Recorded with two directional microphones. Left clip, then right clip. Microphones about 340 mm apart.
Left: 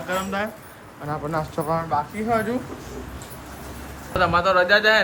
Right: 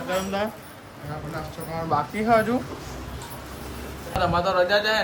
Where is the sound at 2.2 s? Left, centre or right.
Centre.